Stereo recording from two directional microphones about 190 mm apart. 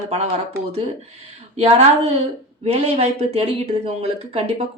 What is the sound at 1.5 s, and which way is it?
Speech, 35° right (ahead or behind).